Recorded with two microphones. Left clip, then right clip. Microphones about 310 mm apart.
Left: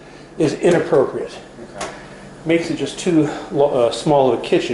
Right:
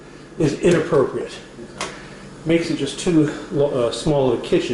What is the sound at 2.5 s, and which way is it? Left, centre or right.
Speech, centre.